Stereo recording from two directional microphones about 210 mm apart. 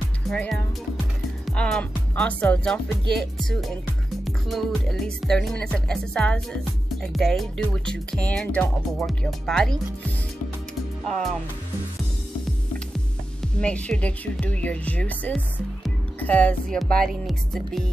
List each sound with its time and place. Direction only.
0.3 s speech: centre (ahead or behind)
13.4 s speech: 5° left (ahead or behind)